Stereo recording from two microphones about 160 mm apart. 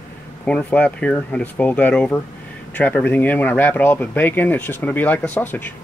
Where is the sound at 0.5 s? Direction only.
5° left (ahead or behind).